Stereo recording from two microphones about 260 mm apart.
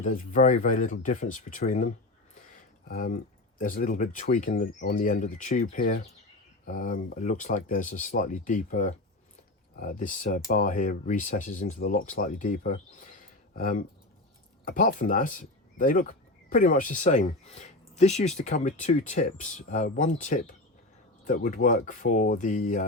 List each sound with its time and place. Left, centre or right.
0.0 s speech: left
2.9 s speech: left